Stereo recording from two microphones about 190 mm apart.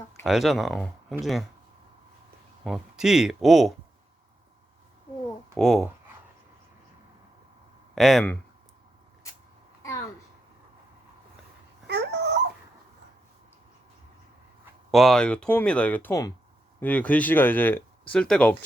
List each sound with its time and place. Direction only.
0.3 s speech: centre (ahead or behind)
2.6 s speech: centre (ahead or behind)
5.5 s speech: centre (ahead or behind)
7.9 s speech: centre (ahead or behind)
11.9 s dog: 60° right (ahead or behind)
14.8 s speech: centre (ahead or behind)